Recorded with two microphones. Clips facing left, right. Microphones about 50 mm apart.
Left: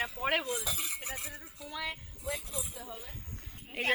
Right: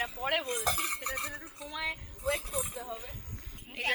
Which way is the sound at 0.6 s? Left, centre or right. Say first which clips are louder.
Right 6 dB; right.